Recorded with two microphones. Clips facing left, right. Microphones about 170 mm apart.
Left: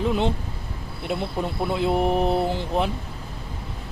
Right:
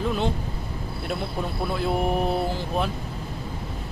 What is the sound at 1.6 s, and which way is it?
Mantra, 20° left (ahead or behind).